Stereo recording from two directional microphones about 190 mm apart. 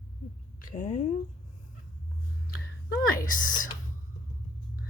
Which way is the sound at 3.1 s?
45° left (ahead or behind).